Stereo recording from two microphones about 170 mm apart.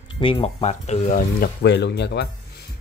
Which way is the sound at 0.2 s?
30° left (ahead or behind).